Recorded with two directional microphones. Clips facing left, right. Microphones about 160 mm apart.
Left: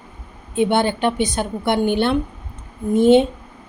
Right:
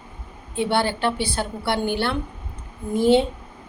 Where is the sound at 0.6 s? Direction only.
20° left (ahead or behind).